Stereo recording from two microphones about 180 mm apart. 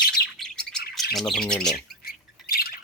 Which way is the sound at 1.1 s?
Centre (ahead or behind).